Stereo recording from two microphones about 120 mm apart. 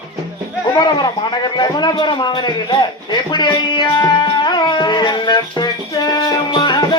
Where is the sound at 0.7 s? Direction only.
35° left (ahead or behind).